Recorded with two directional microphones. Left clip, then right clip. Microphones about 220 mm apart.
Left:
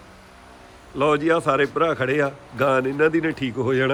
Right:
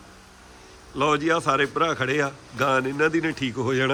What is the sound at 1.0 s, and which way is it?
A man's voice, 5° right (ahead or behind).